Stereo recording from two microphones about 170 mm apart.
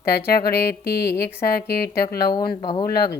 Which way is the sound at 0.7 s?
70° left (ahead or behind).